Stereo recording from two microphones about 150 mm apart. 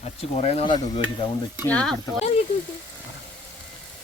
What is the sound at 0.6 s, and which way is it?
Stir, 30° left (ahead or behind).